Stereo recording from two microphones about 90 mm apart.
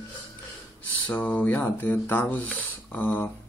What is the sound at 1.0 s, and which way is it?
Speech, 15° left (ahead or behind).